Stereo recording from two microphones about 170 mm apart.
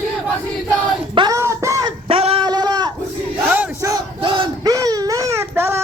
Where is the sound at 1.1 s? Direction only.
25° right (ahead or behind).